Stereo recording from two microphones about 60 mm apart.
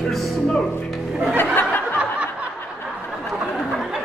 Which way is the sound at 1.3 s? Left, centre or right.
Left.